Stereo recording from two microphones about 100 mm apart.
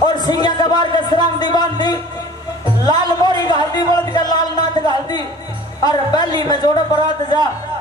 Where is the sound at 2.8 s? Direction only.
45° left (ahead or behind).